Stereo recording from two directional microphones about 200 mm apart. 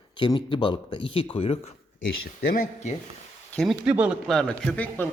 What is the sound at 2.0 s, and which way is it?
Speech, 50° left (ahead or behind).